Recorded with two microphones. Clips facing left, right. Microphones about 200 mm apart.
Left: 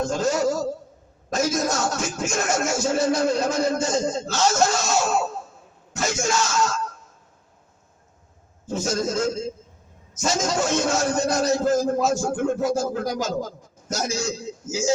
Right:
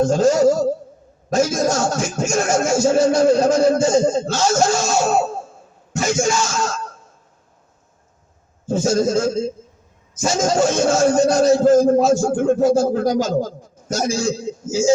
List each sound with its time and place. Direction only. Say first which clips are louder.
0.0 s music: right 8 dB; 30° right (ahead or behind)
8.6 s music: right 7 dB; 30° right (ahead or behind)